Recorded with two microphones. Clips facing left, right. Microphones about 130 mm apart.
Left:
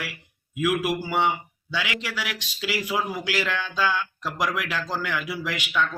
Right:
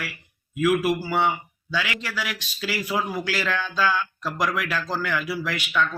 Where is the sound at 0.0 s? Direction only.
15° left (ahead or behind).